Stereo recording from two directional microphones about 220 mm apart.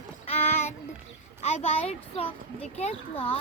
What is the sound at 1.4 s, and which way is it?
Speech, 30° left (ahead or behind).